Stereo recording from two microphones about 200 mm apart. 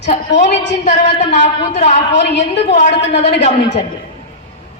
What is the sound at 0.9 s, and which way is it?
Speech, 40° left (ahead or behind).